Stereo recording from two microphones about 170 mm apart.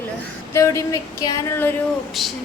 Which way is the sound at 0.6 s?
15° left (ahead or behind).